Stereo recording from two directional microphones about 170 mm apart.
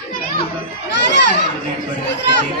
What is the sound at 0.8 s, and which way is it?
Speech, 90° left.